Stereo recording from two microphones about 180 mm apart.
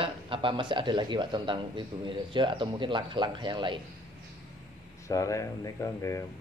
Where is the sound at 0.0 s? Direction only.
30° right (ahead or behind).